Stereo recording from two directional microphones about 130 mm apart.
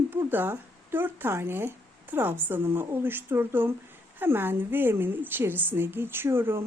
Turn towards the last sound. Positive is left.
turn(degrees=-20)  # may be behind; listen again after turning